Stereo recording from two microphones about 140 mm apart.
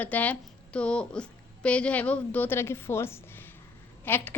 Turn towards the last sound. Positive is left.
turn(degrees=15)  # may be behind; listen again after turning